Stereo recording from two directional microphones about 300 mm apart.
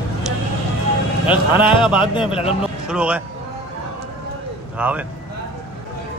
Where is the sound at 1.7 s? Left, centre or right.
Centre.